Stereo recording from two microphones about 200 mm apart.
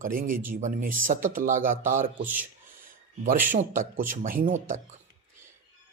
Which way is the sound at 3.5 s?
40° right (ahead or behind).